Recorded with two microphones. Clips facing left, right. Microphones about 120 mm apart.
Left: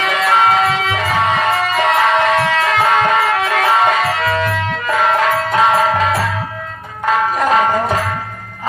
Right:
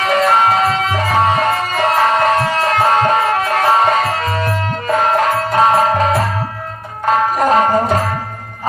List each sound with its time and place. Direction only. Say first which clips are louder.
0.0 s music: right 1 dB; 35° right (ahead or behind)